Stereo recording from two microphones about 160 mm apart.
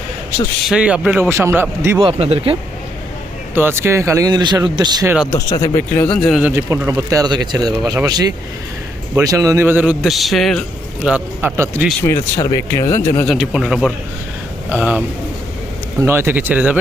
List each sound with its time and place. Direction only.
0.7 s a man's voice: 5° right (ahead or behind)
2.0 s speech: 35° right (ahead or behind)
3.5 s speech: 15° right (ahead or behind)
5.0 s speech: 5° right (ahead or behind)
5.3 s speech: 20° left (ahead or behind)
6.1 s speech: 5° left (ahead or behind)
6.4 s a man's voice: 15° right (ahead or behind)
11.0 s a man's voice: 10° right (ahead or behind)
12.0 s speech: 20° left (ahead or behind)
13.2 s a man's voice: centre (ahead or behind)